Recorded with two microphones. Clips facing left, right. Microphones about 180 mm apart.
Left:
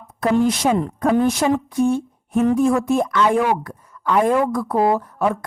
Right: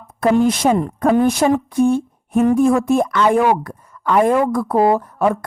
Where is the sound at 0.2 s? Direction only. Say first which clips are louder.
Right 3 dB; 55° right (ahead or behind).